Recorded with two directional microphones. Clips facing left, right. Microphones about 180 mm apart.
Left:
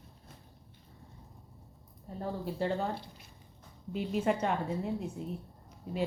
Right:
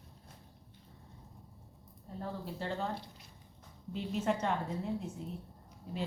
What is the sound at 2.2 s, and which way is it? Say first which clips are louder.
Speech: left 6 dB; 15° left (ahead or behind).